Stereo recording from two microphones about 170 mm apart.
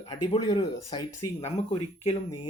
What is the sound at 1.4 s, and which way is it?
Speech, 40° left (ahead or behind).